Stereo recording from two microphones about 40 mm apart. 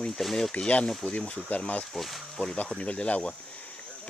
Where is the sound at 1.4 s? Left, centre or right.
Left.